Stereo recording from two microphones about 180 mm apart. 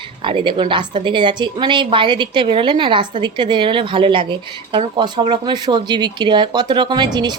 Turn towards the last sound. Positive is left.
turn(degrees=-25)  # may be behind; listen again after turning